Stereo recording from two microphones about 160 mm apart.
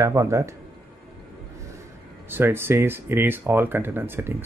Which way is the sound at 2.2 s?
15° right (ahead or behind).